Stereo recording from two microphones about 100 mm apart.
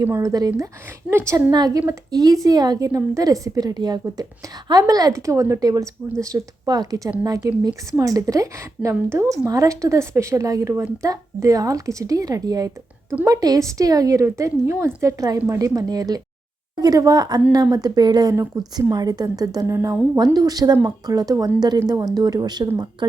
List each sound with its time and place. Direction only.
0.0 s a woman's voice: 30° right (ahead or behind)
1.5 s a woman's voice: 40° right (ahead or behind)
19.7 s a woman's voice: 25° right (ahead or behind)
20.1 s a woman's voice: 40° right (ahead or behind)